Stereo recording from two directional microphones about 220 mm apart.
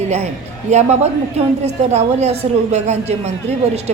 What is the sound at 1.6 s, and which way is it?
A woman's voice, 30° right (ahead or behind).